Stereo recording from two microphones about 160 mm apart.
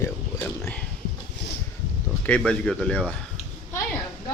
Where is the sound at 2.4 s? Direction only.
5° left (ahead or behind).